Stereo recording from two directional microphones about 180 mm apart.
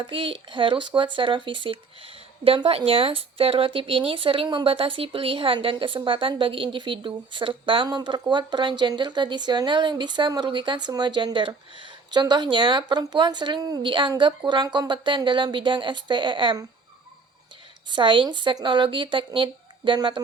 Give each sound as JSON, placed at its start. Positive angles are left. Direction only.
{"t": 0.0, "sound": "speech", "side_deg": -30}
{"t": 17.9, "sound": "speech", "side_deg": -25}